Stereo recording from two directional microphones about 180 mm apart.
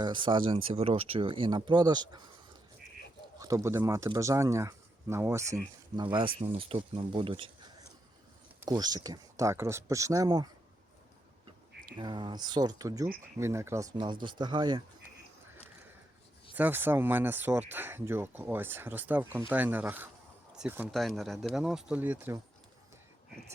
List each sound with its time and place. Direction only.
0.0 s speech: 25° right (ahead or behind)
3.3 s speech: 20° right (ahead or behind)
6.0 s speech: 25° right (ahead or behind)
11.9 s speech: 25° right (ahead or behind)
16.6 s speech: 10° right (ahead or behind)